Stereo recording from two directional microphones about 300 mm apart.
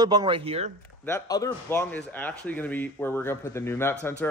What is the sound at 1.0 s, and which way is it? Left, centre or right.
Speech, centre.